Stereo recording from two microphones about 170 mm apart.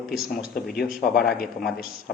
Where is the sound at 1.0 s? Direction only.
65° left (ahead or behind).